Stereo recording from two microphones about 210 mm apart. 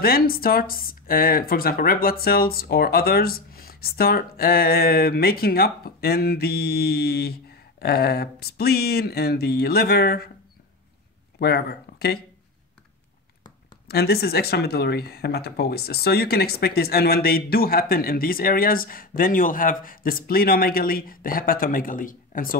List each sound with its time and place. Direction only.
0.0 s speech: 45° left (ahead or behind)
11.3 s speech: 50° left (ahead or behind)
13.8 s speech: 50° left (ahead or behind)